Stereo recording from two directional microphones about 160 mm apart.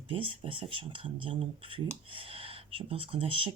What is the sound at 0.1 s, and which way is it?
Speech, 35° right (ahead or behind).